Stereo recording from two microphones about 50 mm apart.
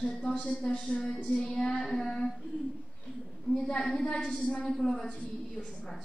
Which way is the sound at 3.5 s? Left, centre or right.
Centre.